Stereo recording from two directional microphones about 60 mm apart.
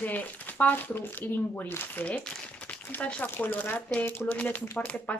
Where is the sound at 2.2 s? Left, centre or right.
Centre.